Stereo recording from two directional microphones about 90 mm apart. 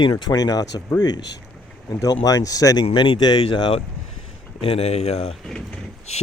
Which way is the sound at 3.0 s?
60° left (ahead or behind).